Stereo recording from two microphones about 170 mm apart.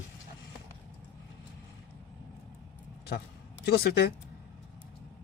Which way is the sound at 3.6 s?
70° left (ahead or behind).